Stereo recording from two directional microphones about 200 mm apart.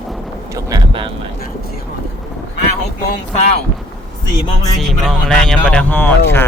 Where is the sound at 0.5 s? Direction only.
25° right (ahead or behind).